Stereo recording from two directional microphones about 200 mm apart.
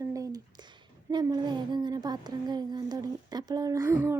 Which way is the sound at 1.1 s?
20° right (ahead or behind).